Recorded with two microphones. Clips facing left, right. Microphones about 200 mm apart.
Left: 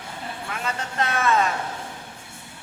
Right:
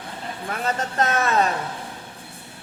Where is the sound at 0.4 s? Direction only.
35° right (ahead or behind).